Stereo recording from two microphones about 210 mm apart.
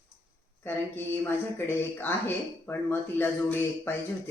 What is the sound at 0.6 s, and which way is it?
Speech, 10° left (ahead or behind).